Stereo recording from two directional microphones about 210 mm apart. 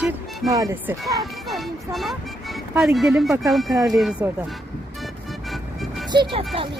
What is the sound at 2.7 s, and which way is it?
Speech, centre (ahead or behind).